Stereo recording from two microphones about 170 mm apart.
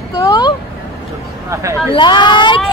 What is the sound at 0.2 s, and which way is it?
Vehicle, 25° left (ahead or behind).